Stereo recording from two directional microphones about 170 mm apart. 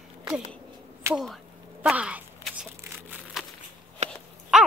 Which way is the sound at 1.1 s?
Centre (ahead or behind).